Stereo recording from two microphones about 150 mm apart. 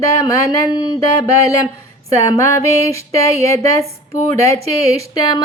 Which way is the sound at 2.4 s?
20° left (ahead or behind).